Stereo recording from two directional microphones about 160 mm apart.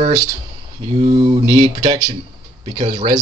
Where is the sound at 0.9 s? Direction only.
35° right (ahead or behind).